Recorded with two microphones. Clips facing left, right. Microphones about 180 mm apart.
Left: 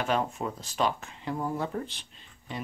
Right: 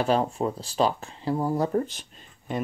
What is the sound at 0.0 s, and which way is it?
Speech, 35° right (ahead or behind).